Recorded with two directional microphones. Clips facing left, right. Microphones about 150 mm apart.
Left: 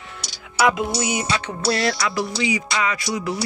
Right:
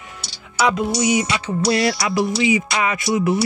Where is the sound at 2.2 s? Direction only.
20° right (ahead or behind).